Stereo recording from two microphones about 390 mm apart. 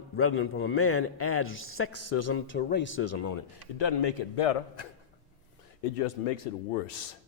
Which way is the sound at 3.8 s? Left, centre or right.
Left.